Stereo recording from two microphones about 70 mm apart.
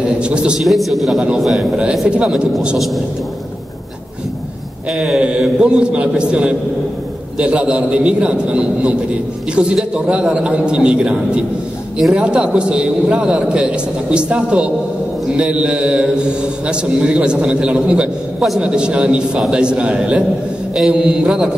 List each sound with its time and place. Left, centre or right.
0.0 s a man's voice: centre
0.6 s a man's voice: centre
1.8 s a man's voice: centre
4.9 s a man's voice: centre